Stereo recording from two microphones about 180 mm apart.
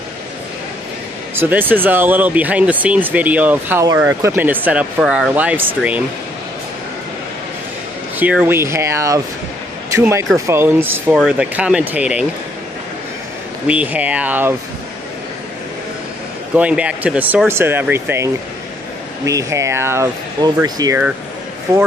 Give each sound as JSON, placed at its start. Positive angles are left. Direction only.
{"t": 1.3, "sound": "speech", "side_deg": -10}
{"t": 8.2, "sound": "speech", "side_deg": -10}
{"t": 13.7, "sound": "speech", "side_deg": -10}
{"t": 16.5, "sound": "speech", "side_deg": -5}